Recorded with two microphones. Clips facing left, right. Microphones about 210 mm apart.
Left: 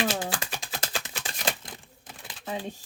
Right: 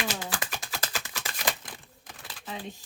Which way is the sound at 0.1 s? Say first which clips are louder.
Left 3 dB; 25° left (ahead or behind).